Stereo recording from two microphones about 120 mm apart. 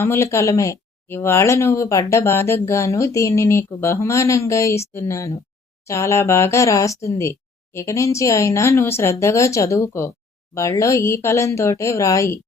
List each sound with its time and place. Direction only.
0.0 s speech: 20° left (ahead or behind)